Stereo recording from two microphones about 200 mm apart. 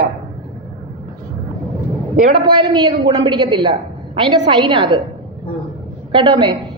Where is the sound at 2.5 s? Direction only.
20° right (ahead or behind).